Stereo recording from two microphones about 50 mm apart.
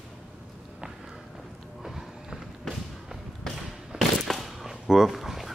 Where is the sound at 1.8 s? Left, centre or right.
Centre.